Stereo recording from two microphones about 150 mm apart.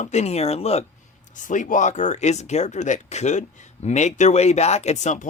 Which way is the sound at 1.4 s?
60° left (ahead or behind).